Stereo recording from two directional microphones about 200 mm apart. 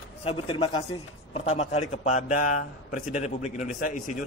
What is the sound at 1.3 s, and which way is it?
A man's voice, 30° left (ahead or behind).